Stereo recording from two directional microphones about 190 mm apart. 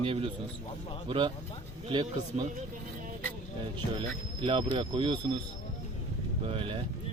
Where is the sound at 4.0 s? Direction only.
25° right (ahead or behind).